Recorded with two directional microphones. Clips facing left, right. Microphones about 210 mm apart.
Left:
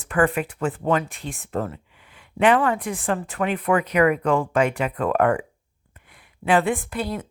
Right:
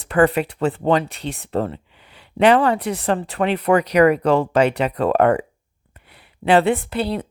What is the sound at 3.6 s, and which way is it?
Speech, 75° right (ahead or behind).